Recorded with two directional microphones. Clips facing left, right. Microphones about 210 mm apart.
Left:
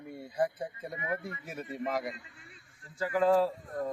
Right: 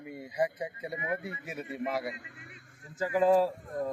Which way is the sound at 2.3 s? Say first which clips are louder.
Right 4 dB; 60° right (ahead or behind).